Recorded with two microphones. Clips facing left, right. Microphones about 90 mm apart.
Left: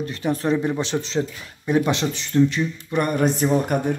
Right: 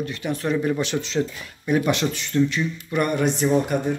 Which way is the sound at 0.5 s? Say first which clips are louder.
Even; 25° left (ahead or behind).